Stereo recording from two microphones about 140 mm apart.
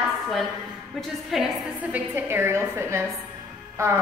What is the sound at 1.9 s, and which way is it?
A woman's voice, 15° right (ahead or behind).